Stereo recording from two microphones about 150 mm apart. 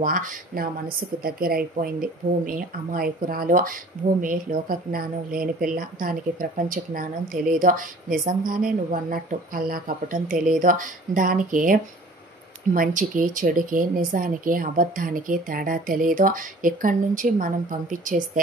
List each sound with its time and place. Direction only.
0.0 s speech: 60° right (ahead or behind); by 1.6 s 85° right
1.8 s speech: 70° right (ahead or behind)